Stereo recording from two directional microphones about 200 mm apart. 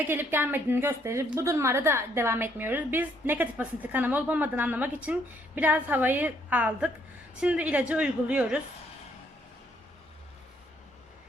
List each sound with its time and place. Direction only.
0.1 s a woman's voice: 10° right (ahead or behind)